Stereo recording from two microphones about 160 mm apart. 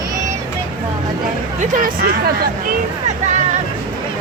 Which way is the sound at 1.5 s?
55° right (ahead or behind).